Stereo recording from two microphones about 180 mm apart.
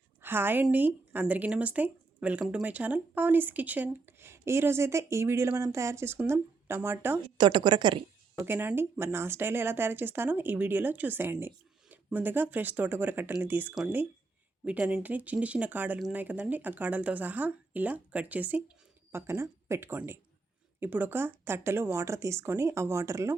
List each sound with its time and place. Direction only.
0.2 s speech: 10° right (ahead or behind)
7.3 s a woman's voice: 25° right (ahead or behind)
8.4 s speech: 10° right (ahead or behind)